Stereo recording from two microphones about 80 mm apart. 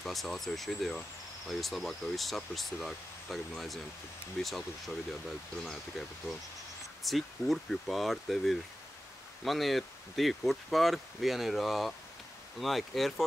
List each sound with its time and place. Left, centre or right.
0.0 s speech: centre
6.0 s speech: centre